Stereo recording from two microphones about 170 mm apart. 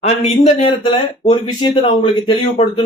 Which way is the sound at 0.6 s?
30° left (ahead or behind).